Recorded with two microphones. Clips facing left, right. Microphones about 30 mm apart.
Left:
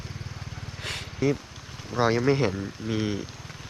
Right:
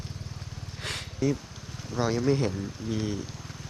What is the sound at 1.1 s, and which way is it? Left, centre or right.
Speech, left.